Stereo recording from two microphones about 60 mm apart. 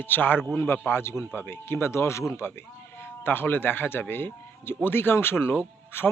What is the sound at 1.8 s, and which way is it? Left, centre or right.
Speech, left.